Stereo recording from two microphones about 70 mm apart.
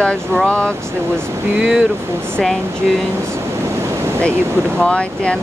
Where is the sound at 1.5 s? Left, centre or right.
Centre.